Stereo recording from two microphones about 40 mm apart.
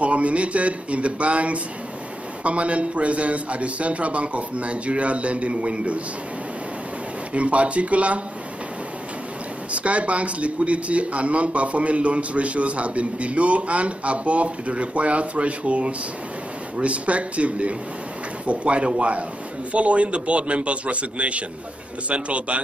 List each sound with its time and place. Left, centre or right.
0.0 s a man's voice: right
7.3 s a man's voice: right
9.7 s a man's voice: right